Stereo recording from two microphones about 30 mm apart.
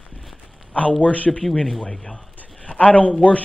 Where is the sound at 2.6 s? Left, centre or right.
Left.